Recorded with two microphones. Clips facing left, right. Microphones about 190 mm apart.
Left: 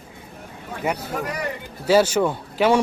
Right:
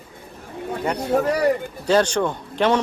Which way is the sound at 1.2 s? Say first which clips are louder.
Right 8 dB; 35° right (ahead or behind).